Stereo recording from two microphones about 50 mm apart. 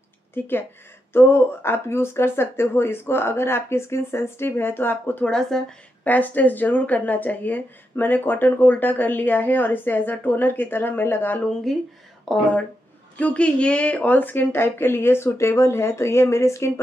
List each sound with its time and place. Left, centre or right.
0.3 s speech: left
5.2 s speech: centre
6.0 s speech: left
11.7 s speech: centre
13.2 s speech: left